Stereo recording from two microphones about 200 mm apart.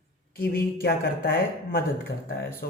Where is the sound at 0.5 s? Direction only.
50° left (ahead or behind).